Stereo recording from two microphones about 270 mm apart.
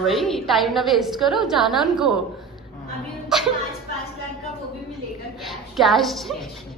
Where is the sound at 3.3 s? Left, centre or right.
Centre.